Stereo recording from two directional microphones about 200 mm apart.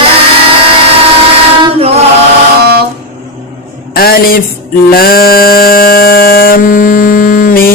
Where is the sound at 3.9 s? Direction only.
50° left (ahead or behind).